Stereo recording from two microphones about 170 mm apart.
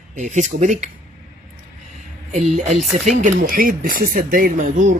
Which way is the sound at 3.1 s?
45° right (ahead or behind).